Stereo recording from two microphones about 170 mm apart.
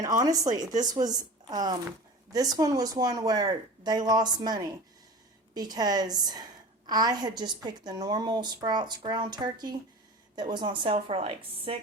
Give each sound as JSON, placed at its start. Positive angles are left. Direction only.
{"t": 0.0, "sound": "a woman's voice", "side_deg": -20}